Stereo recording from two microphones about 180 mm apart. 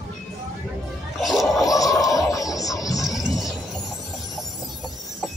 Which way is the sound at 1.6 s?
20° left (ahead or behind).